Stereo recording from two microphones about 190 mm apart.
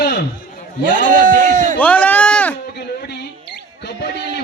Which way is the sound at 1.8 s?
10° left (ahead or behind).